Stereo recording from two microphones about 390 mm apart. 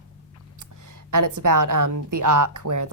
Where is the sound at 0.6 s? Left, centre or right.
Right.